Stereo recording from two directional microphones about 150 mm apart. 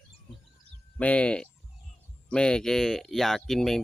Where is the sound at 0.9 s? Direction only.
10° left (ahead or behind).